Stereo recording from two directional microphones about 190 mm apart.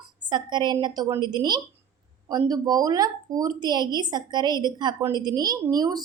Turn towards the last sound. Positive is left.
turn(degrees=-20)  # may be behind; listen again after turning